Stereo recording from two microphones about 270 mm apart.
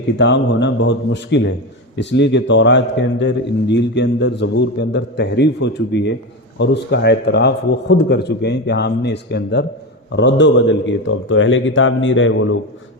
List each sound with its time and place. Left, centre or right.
0.2 s a man's voice: left